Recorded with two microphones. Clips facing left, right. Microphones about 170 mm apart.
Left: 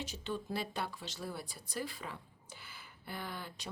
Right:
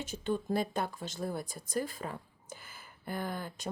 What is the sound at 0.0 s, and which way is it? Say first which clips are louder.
Speech: right 6 dB; 50° right (ahead or behind).